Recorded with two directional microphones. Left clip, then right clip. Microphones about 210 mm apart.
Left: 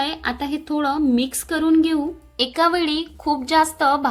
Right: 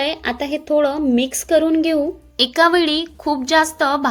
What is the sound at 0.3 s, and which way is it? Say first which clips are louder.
A woman's voice: right 5 dB; 10° right (ahead or behind).